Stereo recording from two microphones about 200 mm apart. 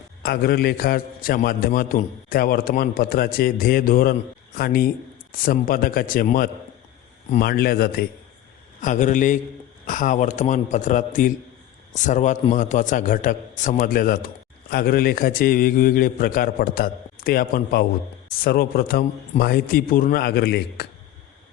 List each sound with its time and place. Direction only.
0.2 s a man's voice: 50° left (ahead or behind)